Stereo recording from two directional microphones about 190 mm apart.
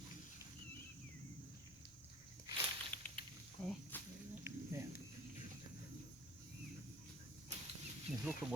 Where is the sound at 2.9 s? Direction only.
10° left (ahead or behind).